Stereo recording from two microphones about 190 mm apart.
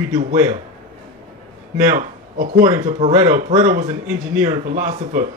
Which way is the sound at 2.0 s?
45° right (ahead or behind).